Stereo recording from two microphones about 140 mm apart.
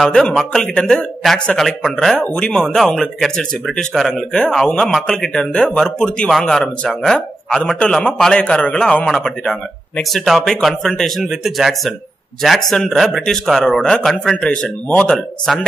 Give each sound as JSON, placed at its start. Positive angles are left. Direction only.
{"t": 0.0, "sound": "a man's voice", "side_deg": 5}